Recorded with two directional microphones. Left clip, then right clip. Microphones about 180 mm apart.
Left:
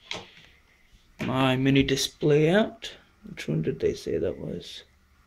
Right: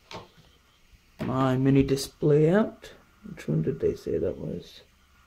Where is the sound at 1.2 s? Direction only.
5° right (ahead or behind).